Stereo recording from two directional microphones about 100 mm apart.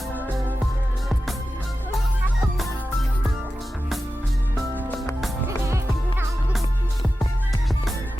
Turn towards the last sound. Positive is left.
turn(degrees=-30)  # may be behind; listen again after turning